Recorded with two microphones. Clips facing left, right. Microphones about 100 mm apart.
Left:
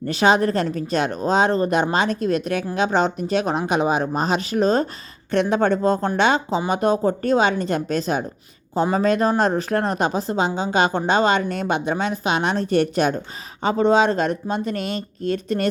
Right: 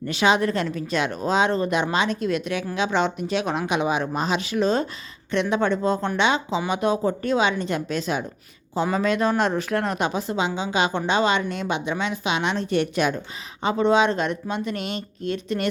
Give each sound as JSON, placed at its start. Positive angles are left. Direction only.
{"t": 0.0, "sound": "a woman's voice", "side_deg": 40}